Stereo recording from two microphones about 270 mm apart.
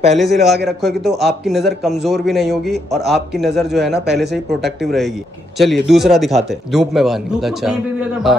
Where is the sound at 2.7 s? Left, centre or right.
Right.